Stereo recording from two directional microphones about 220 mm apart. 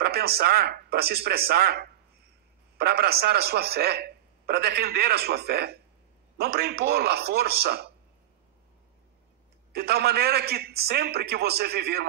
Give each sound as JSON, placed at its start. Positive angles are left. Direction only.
{"t": 0.0, "sound": "speech", "side_deg": -45}
{"t": 9.7, "sound": "speech", "side_deg": -45}